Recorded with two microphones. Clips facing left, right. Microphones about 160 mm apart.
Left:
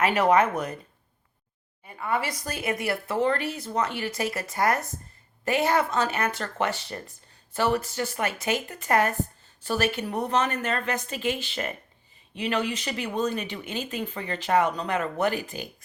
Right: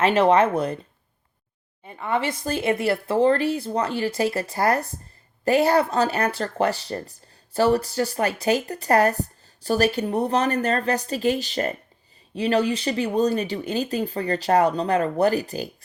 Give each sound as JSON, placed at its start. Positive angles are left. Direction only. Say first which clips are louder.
{"t": 0.0, "sound": "speech", "louder": "right 4 dB", "side_deg": -30}
{"t": 1.8, "sound": "speech", "louder": "right 3 dB", "side_deg": -25}